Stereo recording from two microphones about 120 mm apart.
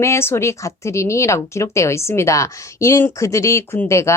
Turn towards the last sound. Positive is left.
turn(degrees=25)  # may be behind; listen again after turning